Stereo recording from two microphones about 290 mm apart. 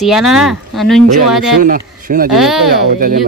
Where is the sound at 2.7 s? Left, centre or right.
Right.